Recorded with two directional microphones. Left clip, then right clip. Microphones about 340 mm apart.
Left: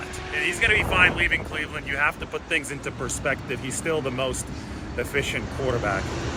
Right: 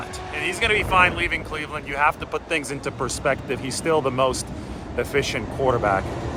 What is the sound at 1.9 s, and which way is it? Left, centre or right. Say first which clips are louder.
Speech: right 4 dB; centre.